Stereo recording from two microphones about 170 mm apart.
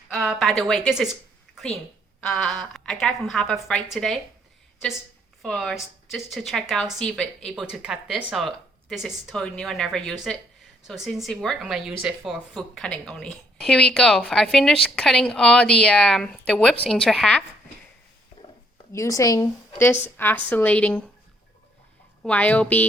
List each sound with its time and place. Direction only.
0.1 s a woman's voice: centre (ahead or behind)
5.4 s a woman's voice: centre (ahead or behind)
18.9 s a woman's voice: 20° left (ahead or behind)
22.2 s a woman's voice: 10° left (ahead or behind)